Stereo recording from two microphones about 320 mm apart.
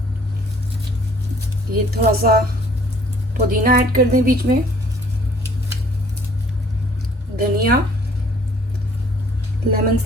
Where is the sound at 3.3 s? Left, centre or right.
Right.